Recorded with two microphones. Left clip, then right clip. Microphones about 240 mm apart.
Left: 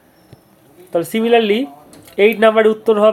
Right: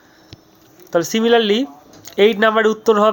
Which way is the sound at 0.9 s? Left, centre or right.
Right.